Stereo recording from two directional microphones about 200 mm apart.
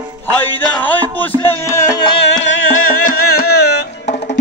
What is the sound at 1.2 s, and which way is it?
Music, 10° left (ahead or behind).